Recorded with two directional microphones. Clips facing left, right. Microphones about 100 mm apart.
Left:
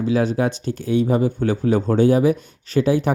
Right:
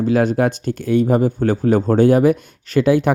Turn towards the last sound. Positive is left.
turn(degrees=-65)  # may be behind; listen again after turning